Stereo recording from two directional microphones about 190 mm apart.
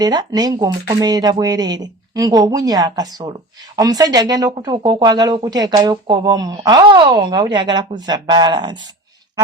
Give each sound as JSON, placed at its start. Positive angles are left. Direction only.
{"t": 0.0, "sound": "speech", "side_deg": -20}